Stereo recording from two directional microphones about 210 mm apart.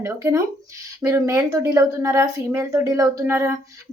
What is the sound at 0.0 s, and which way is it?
Speech, 15° right (ahead or behind).